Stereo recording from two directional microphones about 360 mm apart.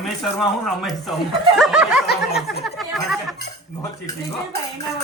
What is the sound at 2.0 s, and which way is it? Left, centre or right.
Snicker, left.